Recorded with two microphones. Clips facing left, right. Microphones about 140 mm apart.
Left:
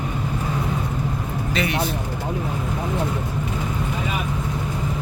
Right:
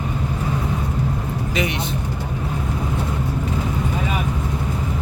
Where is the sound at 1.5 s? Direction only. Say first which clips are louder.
Left 2 dB; 20° right (ahead or behind).